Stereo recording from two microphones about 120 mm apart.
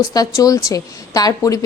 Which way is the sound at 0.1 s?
30° left (ahead or behind).